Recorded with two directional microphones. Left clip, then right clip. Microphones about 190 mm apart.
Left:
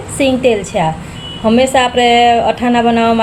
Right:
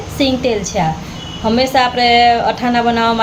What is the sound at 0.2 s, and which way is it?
A woman's voice, 15° left (ahead or behind).